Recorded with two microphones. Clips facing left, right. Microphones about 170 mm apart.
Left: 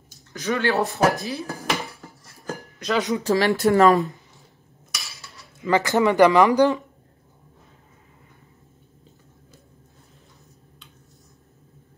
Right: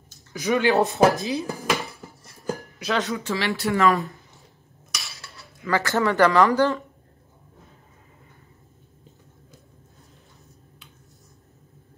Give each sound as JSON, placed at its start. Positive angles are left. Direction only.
{"t": 0.3, "sound": "speech", "side_deg": -15}
{"t": 3.0, "sound": "speech", "side_deg": 20}
{"t": 3.3, "sound": "speech", "side_deg": 40}
{"t": 3.9, "sound": "speech", "side_deg": 20}
{"t": 5.0, "sound": "cutlery", "side_deg": 0}
{"t": 5.7, "sound": "speech", "side_deg": 15}